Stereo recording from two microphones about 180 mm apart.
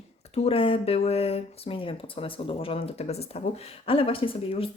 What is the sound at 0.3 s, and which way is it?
Speech, 30° left (ahead or behind).